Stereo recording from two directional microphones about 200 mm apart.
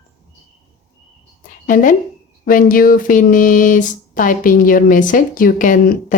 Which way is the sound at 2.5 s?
45° left (ahead or behind).